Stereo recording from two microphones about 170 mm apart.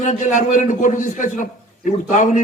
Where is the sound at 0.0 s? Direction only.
45° left (ahead or behind).